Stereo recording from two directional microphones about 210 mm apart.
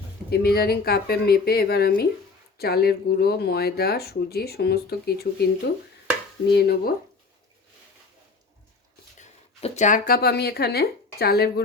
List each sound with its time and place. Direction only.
0.3 s speech: 50° left (ahead or behind)
6.5 s speech: 50° left (ahead or behind)
9.1 s speech: 30° left (ahead or behind); by 11.6 s 50° left (ahead or behind)